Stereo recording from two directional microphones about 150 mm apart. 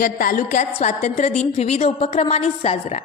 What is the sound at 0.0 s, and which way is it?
A woman's voice, 70° left (ahead or behind).